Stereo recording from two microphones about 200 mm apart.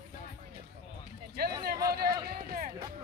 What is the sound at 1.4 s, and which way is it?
Speech, 50° right (ahead or behind).